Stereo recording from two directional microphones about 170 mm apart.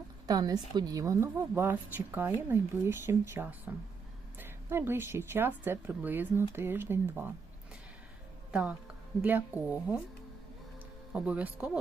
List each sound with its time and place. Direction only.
0.3 s a woman's voice: 20° right (ahead or behind)
9.2 s speech: 10° right (ahead or behind)
11.1 s speech: 5° right (ahead or behind)